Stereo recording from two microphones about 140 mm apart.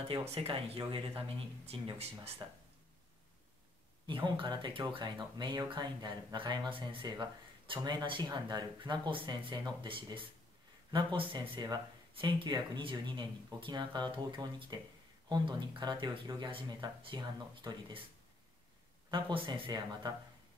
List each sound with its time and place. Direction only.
0.1 s speech: 45° right (ahead or behind)
4.1 s speech: 35° right (ahead or behind)
19.0 s speech: 35° right (ahead or behind)